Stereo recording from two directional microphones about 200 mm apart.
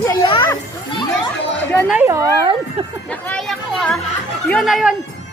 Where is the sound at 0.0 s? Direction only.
20° left (ahead or behind).